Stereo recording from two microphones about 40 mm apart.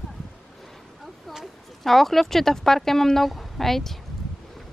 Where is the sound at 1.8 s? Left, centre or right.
Centre.